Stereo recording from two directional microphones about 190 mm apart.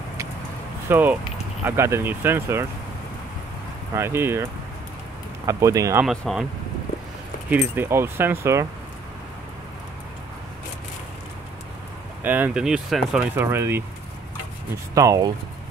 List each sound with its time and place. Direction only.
0.8 s speech: 10° right (ahead or behind)
3.9 s speech: 10° right (ahead or behind)
5.5 s speech: 15° right (ahead or behind)
6.0 s speech: centre (ahead or behind)
7.4 s speech: 10° right (ahead or behind)
12.2 s speech: 10° right (ahead or behind)
15.0 s speech: 20° right (ahead or behind)